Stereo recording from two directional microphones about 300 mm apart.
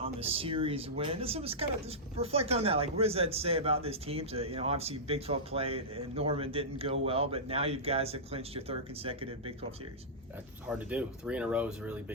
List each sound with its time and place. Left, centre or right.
0.0 s speech: centre
10.7 s speech: centre